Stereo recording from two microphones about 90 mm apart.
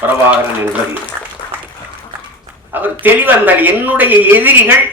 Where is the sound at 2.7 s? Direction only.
20° right (ahead or behind).